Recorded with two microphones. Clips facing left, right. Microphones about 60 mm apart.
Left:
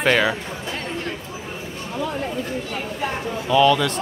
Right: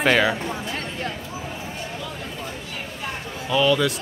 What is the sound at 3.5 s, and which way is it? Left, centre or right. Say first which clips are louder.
Speech: left 3 dB; centre.